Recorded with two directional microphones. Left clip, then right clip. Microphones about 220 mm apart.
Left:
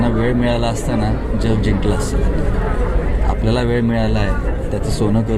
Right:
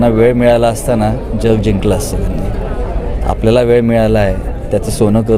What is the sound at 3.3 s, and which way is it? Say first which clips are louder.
A man's voice: right 10 dB; 50° right (ahead or behind).